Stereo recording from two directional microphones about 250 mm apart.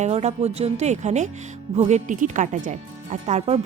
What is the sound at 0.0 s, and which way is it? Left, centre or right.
A woman's voice, right.